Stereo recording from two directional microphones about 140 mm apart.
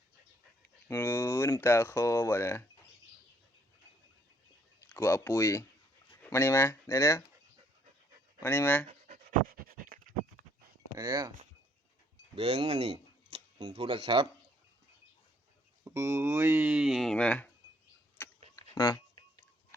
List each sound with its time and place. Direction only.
0.9 s speech: 20° left (ahead or behind)
4.9 s speech: 20° left (ahead or behind)
8.4 s speech: 15° left (ahead or behind)
9.0 s pant: 70° right (ahead or behind)
10.9 s speech: 25° right (ahead or behind)
12.4 s speech: 40° right (ahead or behind)
15.8 s speech: 20° right (ahead or behind); by 17.5 s 10° left (ahead or behind)
18.7 s speech: 30° left (ahead or behind)